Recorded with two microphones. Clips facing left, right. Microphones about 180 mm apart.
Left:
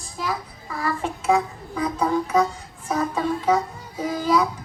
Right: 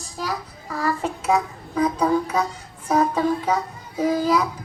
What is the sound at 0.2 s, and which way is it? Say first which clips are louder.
A child's voice: even; 40° right (ahead or behind).